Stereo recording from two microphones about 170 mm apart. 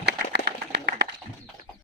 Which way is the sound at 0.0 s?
75° right (ahead or behind).